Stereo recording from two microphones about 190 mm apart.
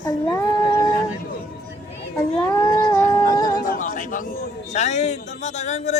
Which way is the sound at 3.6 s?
45° left (ahead or behind).